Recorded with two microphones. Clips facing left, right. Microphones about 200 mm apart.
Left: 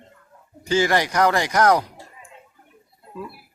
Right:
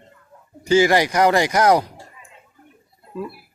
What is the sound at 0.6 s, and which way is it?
Speech, 10° right (ahead or behind).